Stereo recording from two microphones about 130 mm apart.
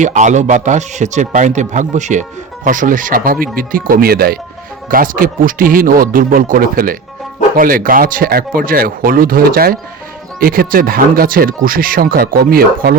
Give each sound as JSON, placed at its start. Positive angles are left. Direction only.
{"t": 0.0, "sound": "speech", "side_deg": -70}
{"t": 2.6, "sound": "speech", "side_deg": -90}